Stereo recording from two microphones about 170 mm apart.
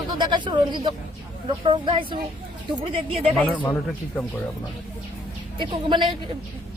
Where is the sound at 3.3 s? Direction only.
10° left (ahead or behind).